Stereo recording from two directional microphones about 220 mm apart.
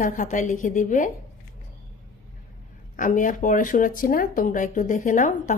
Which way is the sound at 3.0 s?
35° left (ahead or behind).